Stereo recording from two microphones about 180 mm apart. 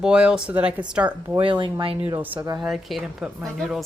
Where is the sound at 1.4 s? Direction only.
25° right (ahead or behind).